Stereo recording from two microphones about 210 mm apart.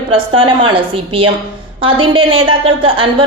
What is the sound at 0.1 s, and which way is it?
A woman's voice, 25° right (ahead or behind).